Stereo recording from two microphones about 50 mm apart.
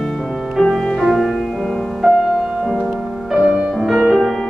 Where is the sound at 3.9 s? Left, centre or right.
Centre.